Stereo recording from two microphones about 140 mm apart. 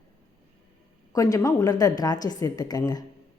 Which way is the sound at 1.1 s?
25° left (ahead or behind).